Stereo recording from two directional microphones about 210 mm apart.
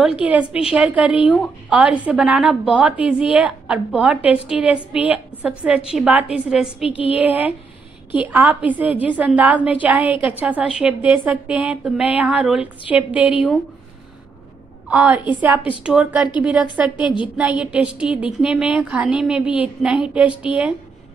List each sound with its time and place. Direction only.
0.2 s a woman's voice: 5° right (ahead or behind)
14.9 s a woman's voice: 5° right (ahead or behind)
17.4 s a woman's voice: 5° right (ahead or behind)